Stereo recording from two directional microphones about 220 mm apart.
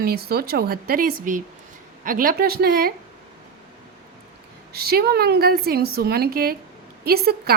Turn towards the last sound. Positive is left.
turn(degrees=-45)  # may be behind; listen again after turning